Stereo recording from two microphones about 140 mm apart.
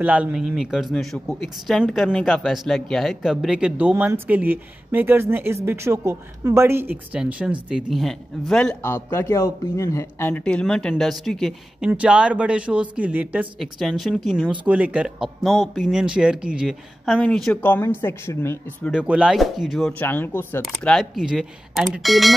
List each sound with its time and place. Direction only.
0.0 s a woman's voice: 10° right (ahead or behind)
8.8 s a woman's voice: 15° left (ahead or behind)
17.6 s speech: 15° left (ahead or behind)
18.9 s speech: 5° right (ahead or behind)
20.0 s speech: 15° left (ahead or behind)
20.6 s speech: centre (ahead or behind)